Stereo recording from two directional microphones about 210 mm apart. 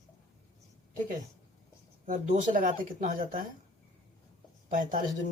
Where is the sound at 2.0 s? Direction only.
40° right (ahead or behind).